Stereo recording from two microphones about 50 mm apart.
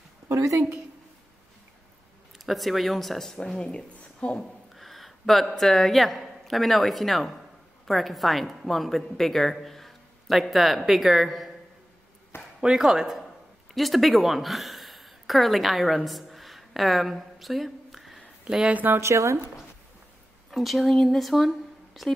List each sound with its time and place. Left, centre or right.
0.3 s a woman's voice: right
2.3 s speech: centre
3.3 s speech: centre
4.4 s a sound: centre
5.6 s a woman's voice: centre
12.3 s a sound: left
12.7 s a woman's voice: centre
18.4 s speech: centre
18.7 s speech: right
18.9 s speech: right
20.5 s speech: centre